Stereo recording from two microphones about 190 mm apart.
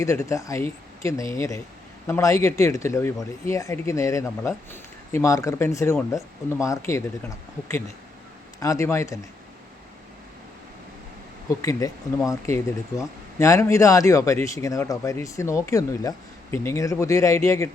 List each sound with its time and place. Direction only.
0.0 s speech: 15° left (ahead or behind)
11.6 s speech: 15° left (ahead or behind)